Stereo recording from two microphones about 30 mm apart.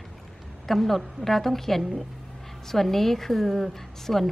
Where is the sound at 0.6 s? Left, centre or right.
Centre.